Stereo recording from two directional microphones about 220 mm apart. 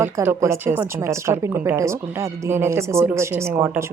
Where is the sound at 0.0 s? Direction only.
10° right (ahead or behind).